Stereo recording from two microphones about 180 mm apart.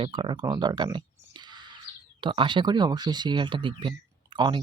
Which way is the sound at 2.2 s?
25° right (ahead or behind).